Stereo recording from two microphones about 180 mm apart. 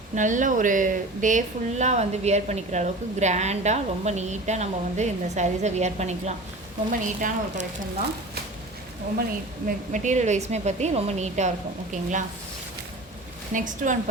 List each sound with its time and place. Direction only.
0.2 s speech: 45° right (ahead or behind)
9.6 s speech: 45° right (ahead or behind)
13.5 s speech: 45° right (ahead or behind)